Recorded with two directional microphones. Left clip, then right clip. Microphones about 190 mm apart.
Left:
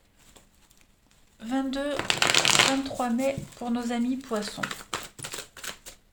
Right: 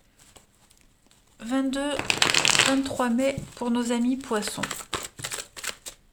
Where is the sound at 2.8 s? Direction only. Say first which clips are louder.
Right 2 dB; 45° right (ahead or behind).